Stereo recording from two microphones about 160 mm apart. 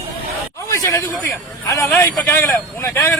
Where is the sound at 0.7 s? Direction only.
20° left (ahead or behind).